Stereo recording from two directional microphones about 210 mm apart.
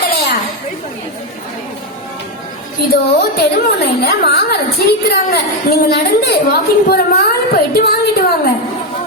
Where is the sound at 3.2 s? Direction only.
50° left (ahead or behind).